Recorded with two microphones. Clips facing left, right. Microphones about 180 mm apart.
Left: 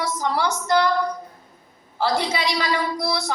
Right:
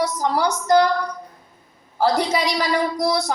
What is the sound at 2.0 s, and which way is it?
Speech, 45° right (ahead or behind).